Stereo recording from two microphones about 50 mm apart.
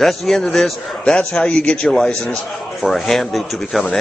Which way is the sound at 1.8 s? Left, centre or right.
Centre.